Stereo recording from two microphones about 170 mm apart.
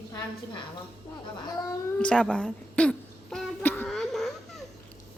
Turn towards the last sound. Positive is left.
turn(degrees=0)  # may be behind; listen again after turning